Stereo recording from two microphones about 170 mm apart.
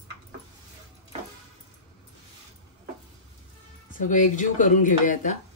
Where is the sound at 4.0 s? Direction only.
50° left (ahead or behind).